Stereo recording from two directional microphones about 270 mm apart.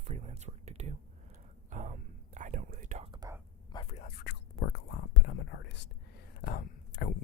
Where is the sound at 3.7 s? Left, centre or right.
Left.